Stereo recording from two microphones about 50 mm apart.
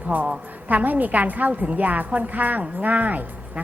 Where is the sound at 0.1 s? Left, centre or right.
Right.